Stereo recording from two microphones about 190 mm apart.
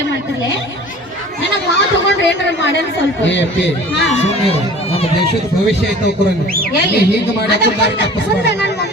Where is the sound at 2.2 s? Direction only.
70° left (ahead or behind).